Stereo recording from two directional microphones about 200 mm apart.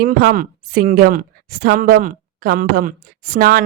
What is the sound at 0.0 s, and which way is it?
Speech, 45° right (ahead or behind).